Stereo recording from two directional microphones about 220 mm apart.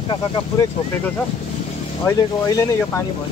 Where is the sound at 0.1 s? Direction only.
20° left (ahead or behind).